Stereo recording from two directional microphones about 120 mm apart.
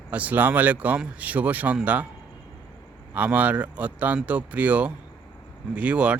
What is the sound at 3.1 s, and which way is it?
Speech, 15° right (ahead or behind).